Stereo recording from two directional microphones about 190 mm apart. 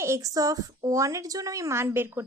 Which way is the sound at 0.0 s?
15° right (ahead or behind).